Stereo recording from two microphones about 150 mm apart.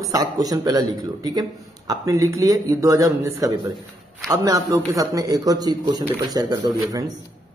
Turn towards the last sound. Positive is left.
turn(degrees=-25)  # may be behind; listen again after turning